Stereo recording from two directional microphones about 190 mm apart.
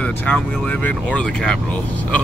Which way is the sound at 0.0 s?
5° left (ahead or behind).